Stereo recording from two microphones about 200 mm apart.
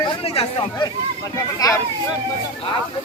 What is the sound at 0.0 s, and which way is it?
Speech, 25° left (ahead or behind).